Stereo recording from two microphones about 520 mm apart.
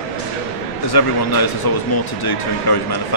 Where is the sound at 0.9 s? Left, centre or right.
Left.